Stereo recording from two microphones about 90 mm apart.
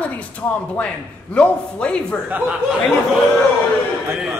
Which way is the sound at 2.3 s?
15° right (ahead or behind).